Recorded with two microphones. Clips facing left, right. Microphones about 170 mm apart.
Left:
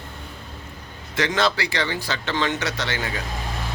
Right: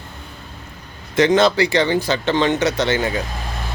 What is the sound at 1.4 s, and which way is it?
Speech, 20° right (ahead or behind).